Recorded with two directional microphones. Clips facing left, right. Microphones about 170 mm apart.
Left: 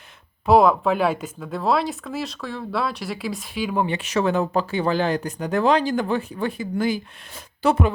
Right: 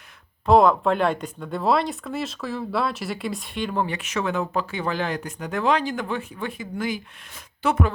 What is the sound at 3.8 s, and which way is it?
Speech, 30° left (ahead or behind).